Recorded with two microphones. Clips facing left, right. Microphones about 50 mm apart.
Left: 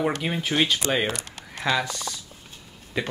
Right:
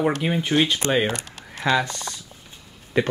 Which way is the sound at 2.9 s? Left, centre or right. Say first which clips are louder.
Right 7 dB; right.